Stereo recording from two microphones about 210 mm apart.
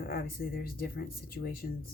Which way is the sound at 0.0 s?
45° left (ahead or behind).